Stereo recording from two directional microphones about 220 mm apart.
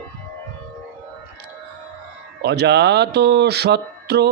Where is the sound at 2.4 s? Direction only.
50° right (ahead or behind).